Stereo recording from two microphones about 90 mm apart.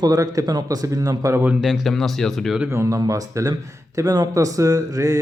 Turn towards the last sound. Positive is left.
turn(degrees=-40)  # may be behind; listen again after turning